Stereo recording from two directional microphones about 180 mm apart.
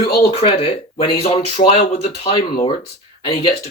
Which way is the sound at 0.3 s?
30° left (ahead or behind).